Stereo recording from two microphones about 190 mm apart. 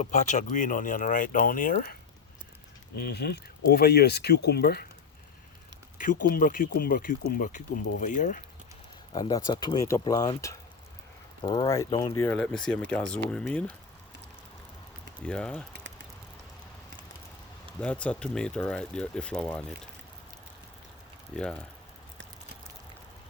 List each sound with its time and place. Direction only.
0.0 s speech: 40° left (ahead or behind)
2.9 s speech: 60° left (ahead or behind)
6.0 s speech: 45° left (ahead or behind)
9.1 s speech: 20° left (ahead or behind)
15.2 s speech: 5° left (ahead or behind)
17.7 s speech: 5° left (ahead or behind)
21.3 s speech: 5° left (ahead or behind)